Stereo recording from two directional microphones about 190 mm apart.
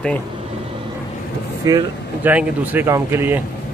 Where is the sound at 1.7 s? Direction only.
10° right (ahead or behind).